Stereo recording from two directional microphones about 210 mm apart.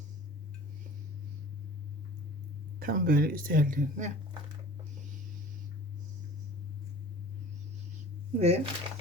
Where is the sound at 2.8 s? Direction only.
45° right (ahead or behind).